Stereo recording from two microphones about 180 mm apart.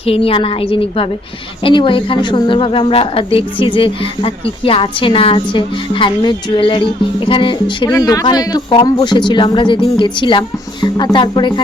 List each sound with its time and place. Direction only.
0.0 s a woman's voice: 30° left (ahead or behind)